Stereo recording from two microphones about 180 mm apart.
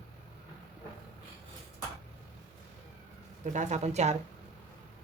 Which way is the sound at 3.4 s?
40° right (ahead or behind).